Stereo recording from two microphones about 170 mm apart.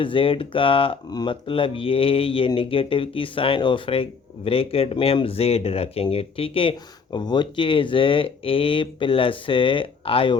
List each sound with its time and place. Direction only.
0.0 s speech: 30° left (ahead or behind)